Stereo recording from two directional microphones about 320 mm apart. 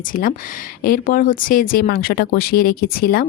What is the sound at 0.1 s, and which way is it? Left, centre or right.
A woman's voice, left.